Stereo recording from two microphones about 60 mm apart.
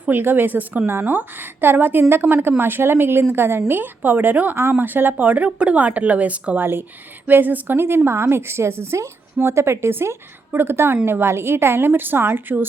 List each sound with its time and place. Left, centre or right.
0.0 s a woman's voice: right
5.2 s speech: right
6.6 s a woman's voice: right